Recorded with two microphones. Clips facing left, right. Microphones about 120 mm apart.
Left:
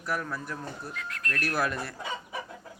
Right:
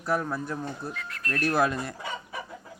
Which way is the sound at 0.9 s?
Centre (ahead or behind).